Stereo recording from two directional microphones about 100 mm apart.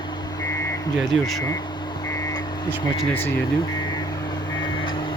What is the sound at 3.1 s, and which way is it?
Speech, 75° left (ahead or behind).